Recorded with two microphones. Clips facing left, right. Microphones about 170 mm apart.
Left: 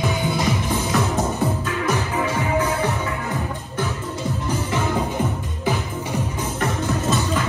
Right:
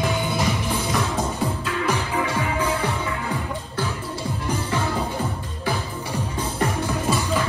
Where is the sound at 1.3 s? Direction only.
10° left (ahead or behind).